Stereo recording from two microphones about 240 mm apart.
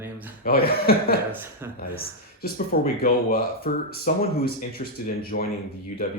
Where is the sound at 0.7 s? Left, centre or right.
Left.